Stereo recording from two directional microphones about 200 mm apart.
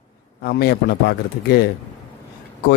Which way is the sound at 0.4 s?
50° left (ahead or behind).